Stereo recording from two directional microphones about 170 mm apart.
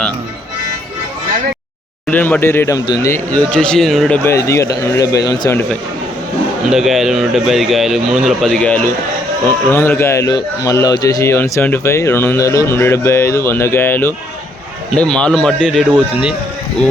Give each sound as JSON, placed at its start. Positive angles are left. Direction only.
{"t": 2.0, "sound": "a man's voice", "side_deg": 10}
{"t": 3.1, "sound": "speech", "side_deg": 5}
{"t": 4.2, "sound": "a man's voice", "side_deg": 15}
{"t": 6.7, "sound": "a man's voice", "side_deg": 0}
{"t": 15.9, "sound": "speech", "side_deg": -10}